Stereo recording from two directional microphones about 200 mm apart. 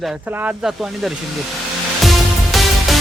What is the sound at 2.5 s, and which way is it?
Music, centre (ahead or behind).